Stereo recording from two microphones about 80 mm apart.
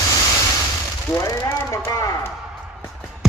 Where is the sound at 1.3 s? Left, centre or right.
Left.